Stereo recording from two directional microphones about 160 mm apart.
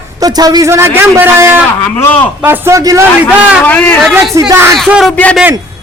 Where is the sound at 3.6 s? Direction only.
10° left (ahead or behind).